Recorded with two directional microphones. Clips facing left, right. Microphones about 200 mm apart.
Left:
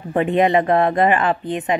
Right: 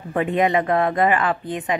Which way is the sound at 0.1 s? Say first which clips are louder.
Left 3 dB; 25° left (ahead or behind).